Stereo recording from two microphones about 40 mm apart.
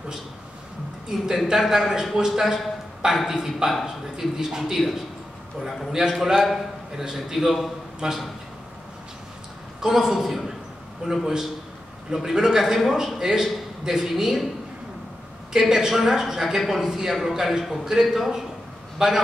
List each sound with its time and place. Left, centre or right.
1.0 s speech: centre
1.6 s a man's voice: centre
6.3 s a man's voice: centre
8.0 s a man's voice: centre
9.8 s a man's voice: centre
11.0 s a man's voice: centre
15.5 s a man's voice: centre